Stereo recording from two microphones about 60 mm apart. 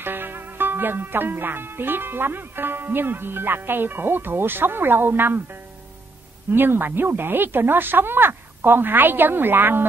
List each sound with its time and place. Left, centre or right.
0.0 s speech: right
6.5 s speech: right